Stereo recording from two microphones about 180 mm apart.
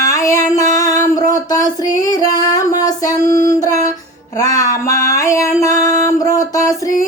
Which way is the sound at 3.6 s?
20° left (ahead or behind).